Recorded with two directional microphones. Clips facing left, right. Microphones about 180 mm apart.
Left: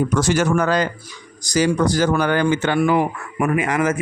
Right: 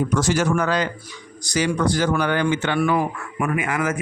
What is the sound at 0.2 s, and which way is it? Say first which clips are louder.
Speech: left 3 dB; 65° left (ahead or behind).